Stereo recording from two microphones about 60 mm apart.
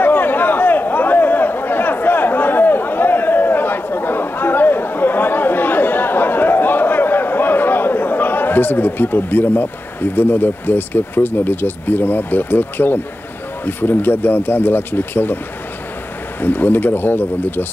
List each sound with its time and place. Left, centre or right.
0.0 s a sound: left
13.7 s speech: left
16.3 s speech: left